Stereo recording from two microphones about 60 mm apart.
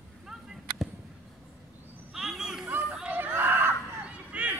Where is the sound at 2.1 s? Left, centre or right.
Centre.